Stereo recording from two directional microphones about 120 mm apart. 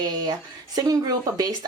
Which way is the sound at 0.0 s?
35° right (ahead or behind).